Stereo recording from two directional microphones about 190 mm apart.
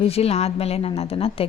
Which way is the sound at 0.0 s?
30° left (ahead or behind).